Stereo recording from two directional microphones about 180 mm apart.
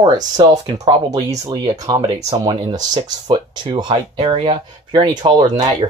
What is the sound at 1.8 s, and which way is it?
Speech, 30° right (ahead or behind).